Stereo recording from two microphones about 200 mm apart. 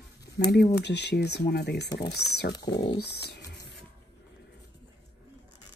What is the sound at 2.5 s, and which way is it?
Speech, 20° left (ahead or behind).